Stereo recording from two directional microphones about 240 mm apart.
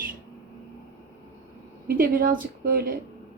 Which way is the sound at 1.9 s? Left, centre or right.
Right.